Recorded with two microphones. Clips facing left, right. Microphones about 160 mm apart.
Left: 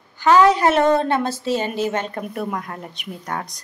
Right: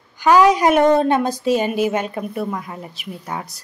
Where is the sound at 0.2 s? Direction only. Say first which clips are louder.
Right 1 dB; 10° right (ahead or behind).